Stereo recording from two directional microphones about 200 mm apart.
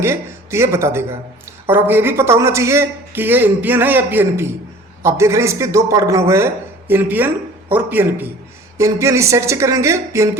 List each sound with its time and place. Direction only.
0.0 s a man's voice: 10° right (ahead or behind)